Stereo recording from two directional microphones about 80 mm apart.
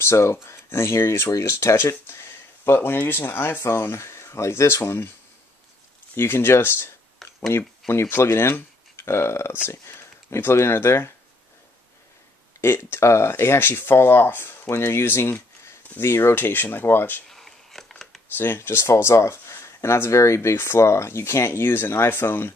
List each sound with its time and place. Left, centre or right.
0.0 s speech: left
6.1 s speech: left
7.2 s a sound: centre
7.9 s speech: left
12.5 s speech: left
17.3 s a sound: centre
18.4 s speech: left